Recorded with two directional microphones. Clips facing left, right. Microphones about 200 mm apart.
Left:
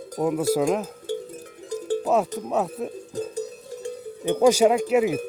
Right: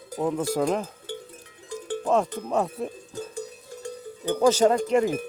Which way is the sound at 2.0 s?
5° left (ahead or behind).